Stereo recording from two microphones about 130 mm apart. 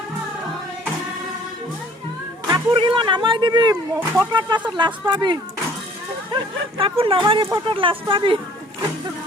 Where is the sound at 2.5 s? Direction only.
40° right (ahead or behind).